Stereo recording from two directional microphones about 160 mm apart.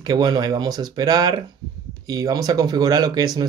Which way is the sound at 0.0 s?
25° right (ahead or behind).